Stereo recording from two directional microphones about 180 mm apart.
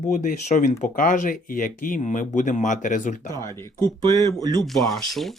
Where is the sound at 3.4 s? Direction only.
15° left (ahead or behind).